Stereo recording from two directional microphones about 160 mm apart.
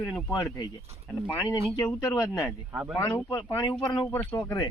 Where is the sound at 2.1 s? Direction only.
15° left (ahead or behind).